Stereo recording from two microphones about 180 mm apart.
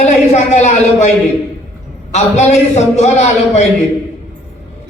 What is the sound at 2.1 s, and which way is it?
A man's voice, 40° left (ahead or behind).